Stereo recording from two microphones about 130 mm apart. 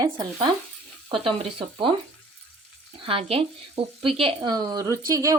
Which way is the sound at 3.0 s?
45° right (ahead or behind).